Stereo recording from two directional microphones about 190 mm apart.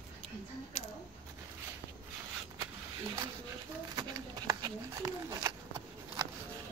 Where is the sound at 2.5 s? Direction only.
15° right (ahead or behind).